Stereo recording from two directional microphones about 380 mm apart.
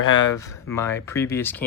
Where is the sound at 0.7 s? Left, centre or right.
Centre.